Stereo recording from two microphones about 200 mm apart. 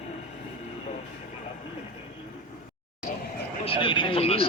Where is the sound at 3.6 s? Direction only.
25° left (ahead or behind).